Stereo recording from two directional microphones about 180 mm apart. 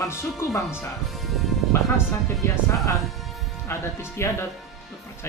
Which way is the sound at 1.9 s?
15° left (ahead or behind).